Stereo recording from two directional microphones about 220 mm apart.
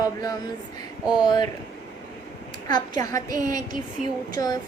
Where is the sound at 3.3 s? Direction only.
35° right (ahead or behind).